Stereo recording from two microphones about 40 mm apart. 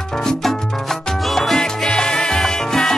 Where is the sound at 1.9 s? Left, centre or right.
Centre.